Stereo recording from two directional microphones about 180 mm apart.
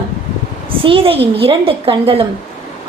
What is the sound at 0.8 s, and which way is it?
A woman's voice, 30° right (ahead or behind).